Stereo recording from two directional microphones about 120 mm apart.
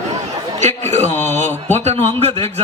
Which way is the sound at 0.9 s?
75° right (ahead or behind).